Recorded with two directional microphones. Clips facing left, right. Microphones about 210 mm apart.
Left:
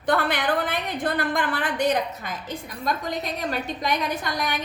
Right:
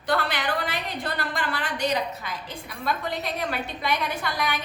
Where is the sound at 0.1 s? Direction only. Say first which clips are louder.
Left 3 dB; 55° left (ahead or behind).